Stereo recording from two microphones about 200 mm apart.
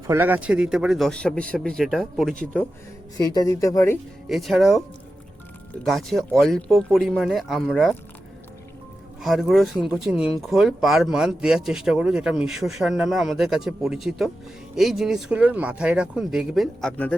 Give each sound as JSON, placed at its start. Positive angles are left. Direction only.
{"t": 0.1, "sound": "speech", "side_deg": -10}
{"t": 3.2, "sound": "speech", "side_deg": 20}
{"t": 4.3, "sound": "speech", "side_deg": 0}
{"t": 5.8, "sound": "speech", "side_deg": 0}
{"t": 9.2, "sound": "speech", "side_deg": 0}